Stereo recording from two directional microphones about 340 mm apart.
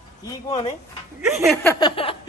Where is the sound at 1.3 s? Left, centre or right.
Centre.